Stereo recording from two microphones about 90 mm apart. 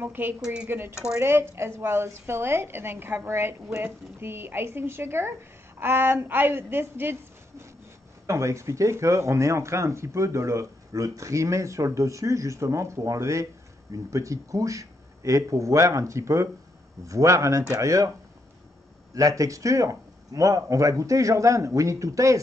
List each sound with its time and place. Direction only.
0.0 s a woman's voice: 20° right (ahead or behind)
0.4 s speech: 10° right (ahead or behind)
0.7 s a woman's voice: 25° right (ahead or behind)
8.3 s speech: 35° right (ahead or behind)
19.1 s speech: 40° right (ahead or behind)